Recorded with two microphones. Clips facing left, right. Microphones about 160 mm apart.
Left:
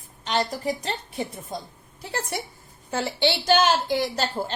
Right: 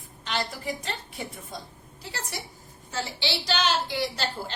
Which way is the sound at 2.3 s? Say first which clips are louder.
Left 6 dB; 55° left (ahead or behind).